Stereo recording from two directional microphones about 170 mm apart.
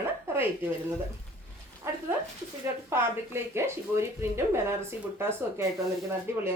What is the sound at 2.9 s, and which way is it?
Speech, 15° right (ahead or behind).